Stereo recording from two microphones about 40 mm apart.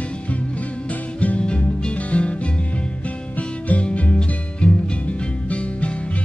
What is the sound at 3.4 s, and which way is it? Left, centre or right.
Music, left.